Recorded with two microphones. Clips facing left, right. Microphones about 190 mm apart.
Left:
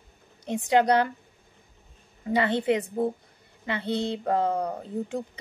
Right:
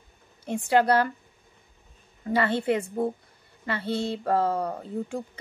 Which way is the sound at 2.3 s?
20° left (ahead or behind).